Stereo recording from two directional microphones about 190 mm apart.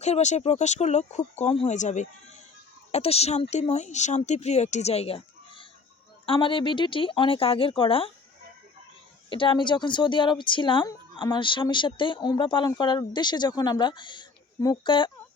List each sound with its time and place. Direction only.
0.0 s a woman's voice: 35° left (ahead or behind)
9.3 s a woman's voice: 25° left (ahead or behind)